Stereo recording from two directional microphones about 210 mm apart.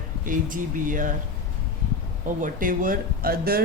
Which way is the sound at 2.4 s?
40° right (ahead or behind).